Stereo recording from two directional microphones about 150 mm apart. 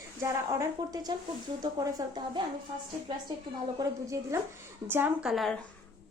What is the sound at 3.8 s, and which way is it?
A woman's voice, 20° right (ahead or behind).